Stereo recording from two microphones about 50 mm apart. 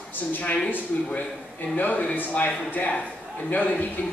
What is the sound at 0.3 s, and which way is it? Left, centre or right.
Speech, left.